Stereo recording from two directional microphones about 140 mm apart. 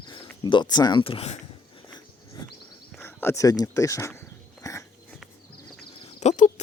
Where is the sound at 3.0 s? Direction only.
20° left (ahead or behind).